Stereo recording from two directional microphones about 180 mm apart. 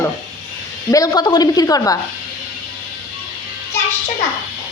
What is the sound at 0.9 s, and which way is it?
A woman's voice, 20° left (ahead or behind).